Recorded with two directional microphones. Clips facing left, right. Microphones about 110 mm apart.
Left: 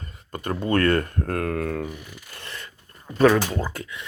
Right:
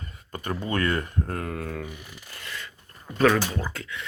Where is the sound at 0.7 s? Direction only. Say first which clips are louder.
Left 7 dB; 55° left (ahead or behind).